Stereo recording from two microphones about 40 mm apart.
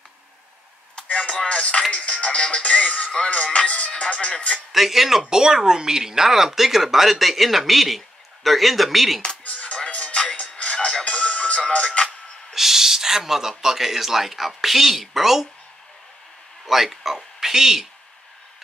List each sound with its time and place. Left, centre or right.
1.0 s chop: left
1.3 s speech: left
4.7 s speech: centre
9.4 s music: left
12.5 s speech: centre
16.6 s speech: centre